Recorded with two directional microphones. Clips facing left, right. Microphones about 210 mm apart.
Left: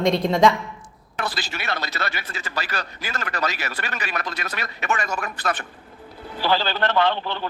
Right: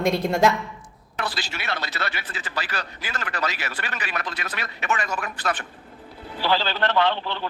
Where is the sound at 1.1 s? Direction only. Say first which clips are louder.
Left 1 dB; 45° left (ahead or behind).